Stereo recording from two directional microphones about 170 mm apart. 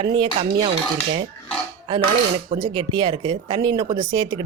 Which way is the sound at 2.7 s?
30° right (ahead or behind).